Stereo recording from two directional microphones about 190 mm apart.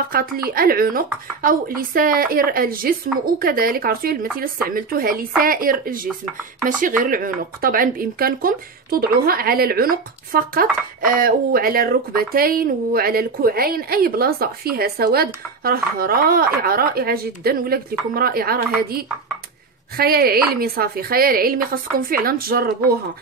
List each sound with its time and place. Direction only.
0.1 s speech: 50° right (ahead or behind)
20.0 s speech: 55° right (ahead or behind)